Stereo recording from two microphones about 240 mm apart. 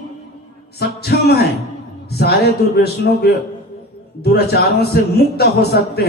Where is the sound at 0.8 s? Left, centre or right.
Left.